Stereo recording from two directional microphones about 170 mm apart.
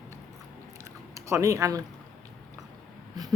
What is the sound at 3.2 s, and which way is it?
Wheeze, 25° right (ahead or behind).